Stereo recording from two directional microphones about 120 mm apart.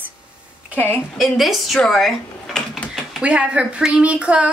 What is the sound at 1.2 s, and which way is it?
Speech, centre (ahead or behind).